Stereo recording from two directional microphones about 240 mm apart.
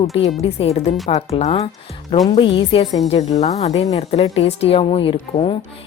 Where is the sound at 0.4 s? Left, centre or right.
Left.